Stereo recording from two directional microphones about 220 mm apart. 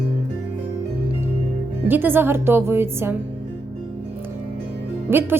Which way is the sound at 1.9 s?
10° right (ahead or behind).